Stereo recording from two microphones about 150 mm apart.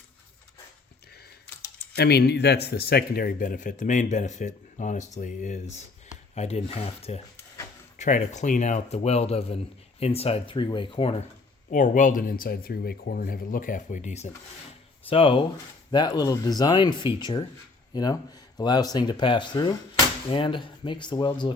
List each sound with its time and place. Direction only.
2.0 s speech: 90° left; by 7.2 s 40° left (ahead or behind)
7.9 s speech: 55° left (ahead or behind); by 11.2 s 35° left (ahead or behind)
11.7 s speech: 60° left (ahead or behind)
15.0 s speech: 35° left (ahead or behind)